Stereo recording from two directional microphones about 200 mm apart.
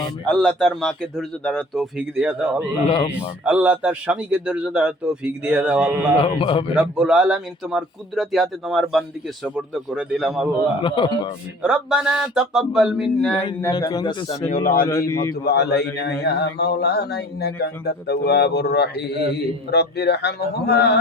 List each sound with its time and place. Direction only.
0.3 s speech: 5° left (ahead or behind)
6.1 s speech: 30° left (ahead or behind)
6.7 s speech: 5° right (ahead or behind)
10.8 s speech: 25° left (ahead or behind)
11.6 s speech: 5° right (ahead or behind)
13.6 s speech: 20° left (ahead or behind)
14.5 s a man's voice: 45° left (ahead or behind)
14.8 s a man's voice: 15° left (ahead or behind)
15.4 s speech: 55° left (ahead or behind)